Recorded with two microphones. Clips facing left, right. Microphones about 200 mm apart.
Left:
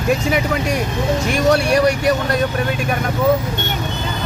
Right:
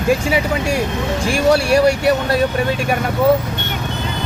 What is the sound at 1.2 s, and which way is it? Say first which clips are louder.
Speech: right 2 dB; 30° right (ahead or behind).